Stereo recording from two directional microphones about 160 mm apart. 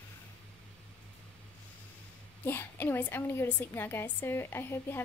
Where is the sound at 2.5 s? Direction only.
15° left (ahead or behind).